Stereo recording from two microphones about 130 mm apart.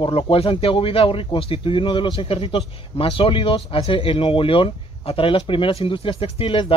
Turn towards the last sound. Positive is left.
turn(degrees=45)  # may be behind; listen again after turning